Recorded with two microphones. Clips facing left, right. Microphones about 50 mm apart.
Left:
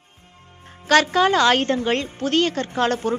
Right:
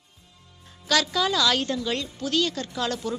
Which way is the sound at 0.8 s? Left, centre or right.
Left.